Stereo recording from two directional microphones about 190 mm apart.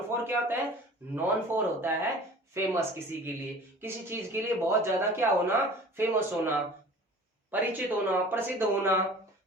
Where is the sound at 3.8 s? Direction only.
10° right (ahead or behind).